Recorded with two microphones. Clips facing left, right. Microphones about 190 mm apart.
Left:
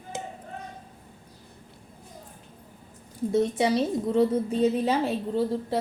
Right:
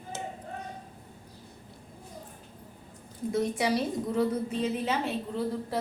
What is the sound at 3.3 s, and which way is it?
A woman's voice, 25° left (ahead or behind).